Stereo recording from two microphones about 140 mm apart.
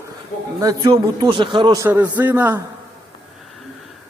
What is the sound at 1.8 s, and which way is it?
Speech, 10° right (ahead or behind).